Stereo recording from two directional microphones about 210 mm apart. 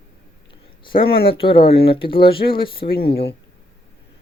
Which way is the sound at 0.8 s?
25° left (ahead or behind).